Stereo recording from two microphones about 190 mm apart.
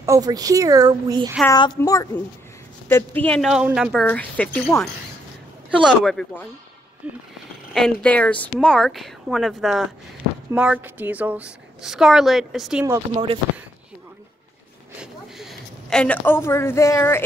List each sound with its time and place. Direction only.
0.0 s speech: 20° right (ahead or behind)
1.5 s a woman's voice: 20° left (ahead or behind)
5.9 s a woman's voice: centre (ahead or behind)
7.7 s a woman's voice: 5° left (ahead or behind)
12.8 s speech: 15° right (ahead or behind)
15.0 s a sound: centre (ahead or behind); by 17.2 s 15° left (ahead or behind)